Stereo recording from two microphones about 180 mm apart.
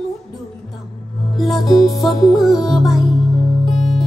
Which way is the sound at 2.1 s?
20° left (ahead or behind).